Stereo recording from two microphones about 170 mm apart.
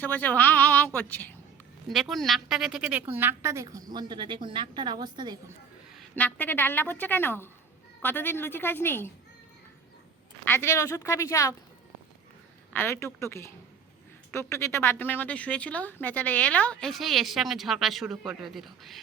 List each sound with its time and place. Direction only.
0.0 s speech: 10° left (ahead or behind)
1.9 s a woman's voice: centre (ahead or behind); by 5.4 s 25° right (ahead or behind)
6.0 s speech: 10° left (ahead or behind)
10.4 s speech: 15° left (ahead or behind)
12.7 s speech: 15° left (ahead or behind)